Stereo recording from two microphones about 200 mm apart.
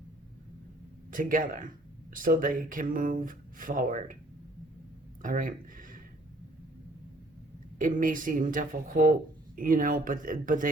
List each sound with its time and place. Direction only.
1.1 s speech: 40° right (ahead or behind)
5.2 s speech: 40° right (ahead or behind)
7.8 s speech: 40° right (ahead or behind)